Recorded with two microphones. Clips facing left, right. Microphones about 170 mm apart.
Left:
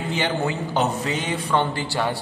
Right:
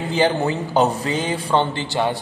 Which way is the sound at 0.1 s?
35° right (ahead or behind).